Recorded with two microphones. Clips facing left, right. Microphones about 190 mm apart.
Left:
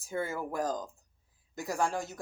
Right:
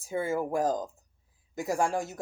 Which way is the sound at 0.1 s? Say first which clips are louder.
Right 5 dB; 15° right (ahead or behind).